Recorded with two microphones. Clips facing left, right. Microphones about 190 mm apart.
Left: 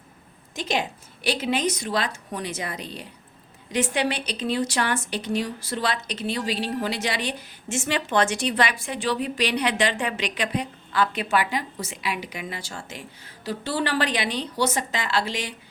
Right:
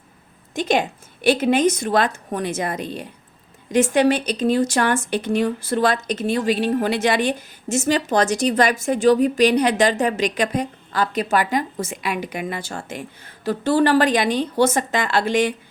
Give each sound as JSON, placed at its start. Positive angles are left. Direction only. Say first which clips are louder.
{"t": 0.5, "sound": "a woman's voice", "louder": "right 7 dB", "side_deg": -55}